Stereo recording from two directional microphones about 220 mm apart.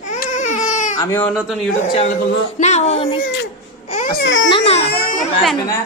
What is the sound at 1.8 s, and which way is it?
A man's voice, 30° left (ahead or behind).